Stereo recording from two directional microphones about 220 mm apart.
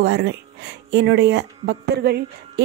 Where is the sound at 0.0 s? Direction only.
50° right (ahead or behind).